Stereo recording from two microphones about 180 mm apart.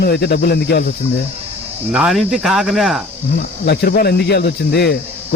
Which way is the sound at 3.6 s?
60° left (ahead or behind).